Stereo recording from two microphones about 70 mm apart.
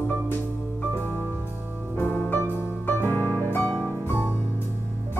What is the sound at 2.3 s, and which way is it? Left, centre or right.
Music, left.